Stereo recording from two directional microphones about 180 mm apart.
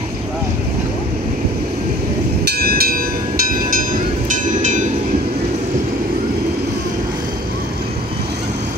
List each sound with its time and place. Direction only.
2.5 s vehicle: 60° right (ahead or behind)
4.6 s train: 45° right (ahead or behind)